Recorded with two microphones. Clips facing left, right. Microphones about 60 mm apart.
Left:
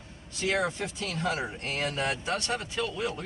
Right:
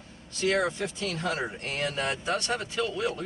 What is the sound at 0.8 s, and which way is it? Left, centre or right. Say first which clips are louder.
Speech: right 3 dB; right.